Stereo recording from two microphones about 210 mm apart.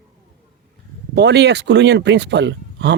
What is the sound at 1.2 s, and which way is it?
Speech, 55° right (ahead or behind).